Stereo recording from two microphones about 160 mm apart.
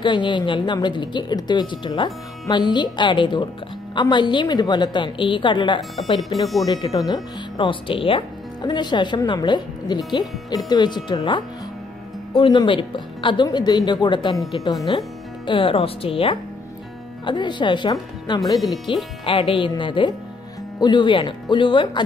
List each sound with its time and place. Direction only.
0.0 s speech: 30° left (ahead or behind)
5.8 s speech: centre (ahead or behind)
6.6 s speech: 25° left (ahead or behind)